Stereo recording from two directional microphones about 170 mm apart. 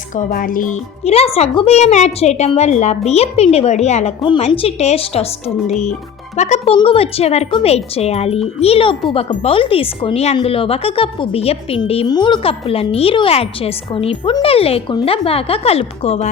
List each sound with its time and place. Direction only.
0.1 s music: 55° left (ahead or behind)
1.0 s speech: 35° left (ahead or behind)